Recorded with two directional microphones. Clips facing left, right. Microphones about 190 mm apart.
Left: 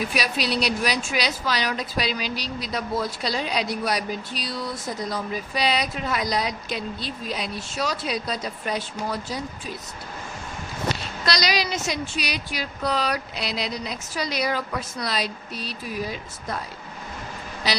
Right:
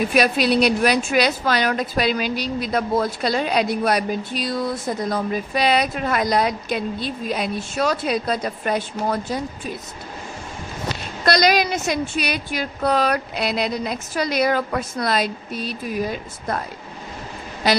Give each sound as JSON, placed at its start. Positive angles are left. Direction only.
{"t": 0.1, "sound": "speech", "side_deg": -55}
{"t": 11.3, "sound": "speech", "side_deg": -55}
{"t": 17.6, "sound": "speech", "side_deg": -55}